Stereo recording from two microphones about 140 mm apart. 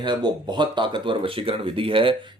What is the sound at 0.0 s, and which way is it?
Speech, 30° right (ahead or behind).